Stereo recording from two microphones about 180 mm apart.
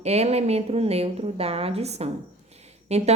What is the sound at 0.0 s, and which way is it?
A woman's voice, 35° right (ahead or behind).